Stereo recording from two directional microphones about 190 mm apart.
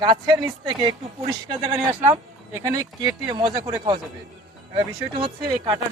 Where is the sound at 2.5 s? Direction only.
15° right (ahead or behind).